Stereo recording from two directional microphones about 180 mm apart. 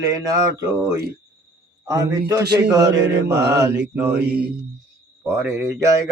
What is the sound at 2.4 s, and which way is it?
Speech, 65° right (ahead or behind).